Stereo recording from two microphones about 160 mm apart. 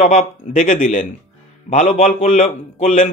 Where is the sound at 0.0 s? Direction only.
45° left (ahead or behind).